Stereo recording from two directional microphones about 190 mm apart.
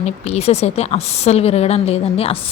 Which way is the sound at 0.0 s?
35° left (ahead or behind).